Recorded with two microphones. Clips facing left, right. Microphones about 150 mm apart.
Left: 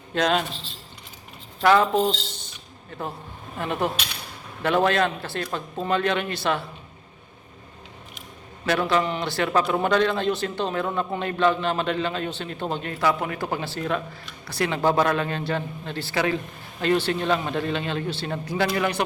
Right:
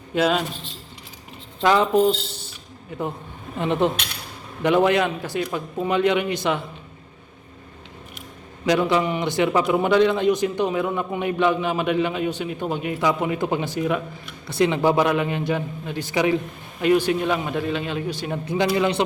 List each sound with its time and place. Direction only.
0.1 s a man's voice: 5° right (ahead or behind)
1.6 s a man's voice: 15° right (ahead or behind)
3.6 s a man's voice: 20° right (ahead or behind)
8.6 s a man's voice: 15° right (ahead or behind)